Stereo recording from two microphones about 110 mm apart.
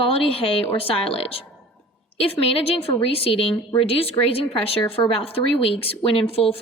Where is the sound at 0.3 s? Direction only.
60° left (ahead or behind).